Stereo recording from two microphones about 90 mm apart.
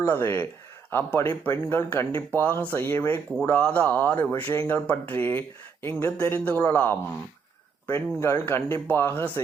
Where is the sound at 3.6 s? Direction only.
15° left (ahead or behind).